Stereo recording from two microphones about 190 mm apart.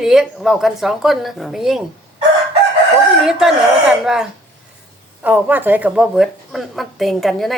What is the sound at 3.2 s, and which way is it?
Speech, centre (ahead or behind).